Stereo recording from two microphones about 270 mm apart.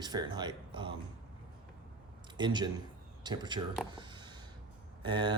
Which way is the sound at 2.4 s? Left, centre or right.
Centre.